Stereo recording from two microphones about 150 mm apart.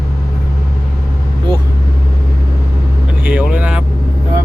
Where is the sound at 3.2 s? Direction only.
10° right (ahead or behind).